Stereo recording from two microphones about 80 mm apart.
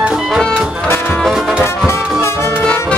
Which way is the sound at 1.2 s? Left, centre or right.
Centre.